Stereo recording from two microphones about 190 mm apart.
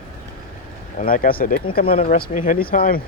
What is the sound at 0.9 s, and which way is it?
Speech, 45° left (ahead or behind).